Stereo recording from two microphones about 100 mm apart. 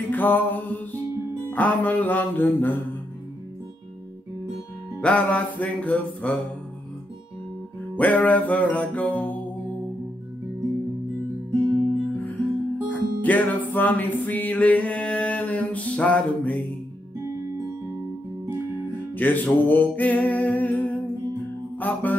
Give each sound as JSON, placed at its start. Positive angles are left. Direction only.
{"t": 0.0, "sound": "music", "side_deg": 20}
{"t": 5.0, "sound": "music", "side_deg": 15}
{"t": 8.0, "sound": "music", "side_deg": 15}
{"t": 11.6, "sound": "music", "side_deg": -50}
{"t": 12.8, "sound": "music", "side_deg": 15}
{"t": 19.1, "sound": "music", "side_deg": 15}